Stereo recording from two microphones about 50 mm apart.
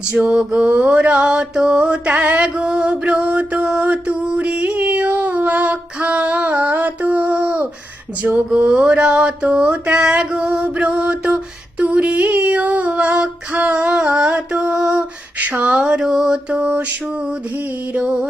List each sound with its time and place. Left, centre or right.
0.2 s a sound: centre
0.6 s mantra: right
3.0 s music: right
4.7 s female singing: right
8.2 s music: right
8.5 s a sound: right
13.5 s female singing: right
15.4 s a sound: right
15.7 s mantra: centre
16.0 s mantra: centre
16.5 s mantra: right
17.1 s mantra: centre
17.5 s mantra: right
17.9 s music: right